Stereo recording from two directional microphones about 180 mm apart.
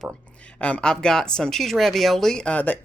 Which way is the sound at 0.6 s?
5° left (ahead or behind).